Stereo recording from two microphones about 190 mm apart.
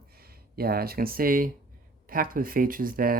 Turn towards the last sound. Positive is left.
turn(degrees=-50)  # may be behind; listen again after turning